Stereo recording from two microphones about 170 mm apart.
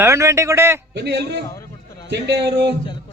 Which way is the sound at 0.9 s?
80° right.